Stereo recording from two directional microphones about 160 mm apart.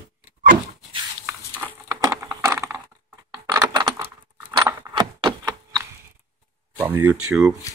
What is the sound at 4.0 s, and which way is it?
Keys jangling, 15° right (ahead or behind).